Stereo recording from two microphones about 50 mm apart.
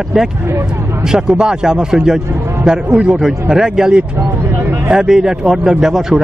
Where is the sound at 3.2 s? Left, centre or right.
Centre.